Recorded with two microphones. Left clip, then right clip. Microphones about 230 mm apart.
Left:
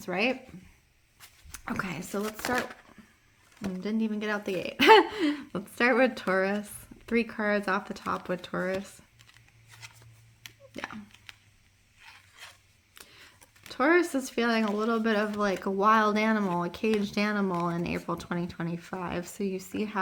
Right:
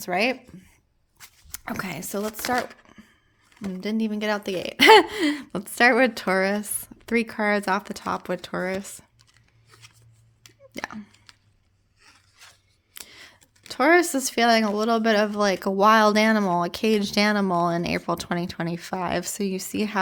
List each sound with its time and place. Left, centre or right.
0.0 s speech: right
1.5 s speech: right
3.8 s speech: right
10.8 s a sound: right
12.0 s a sound: centre
12.9 s speech: right